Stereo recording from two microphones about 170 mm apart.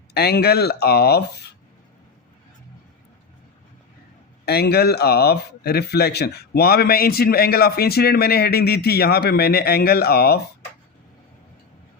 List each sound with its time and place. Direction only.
0.1 s a man's voice: 70° left (ahead or behind)
4.4 s a man's voice: 70° left (ahead or behind)